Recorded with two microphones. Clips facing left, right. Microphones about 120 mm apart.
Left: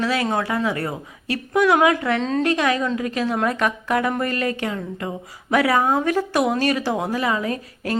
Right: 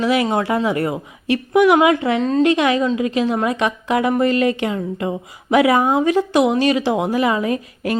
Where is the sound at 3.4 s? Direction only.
5° right (ahead or behind).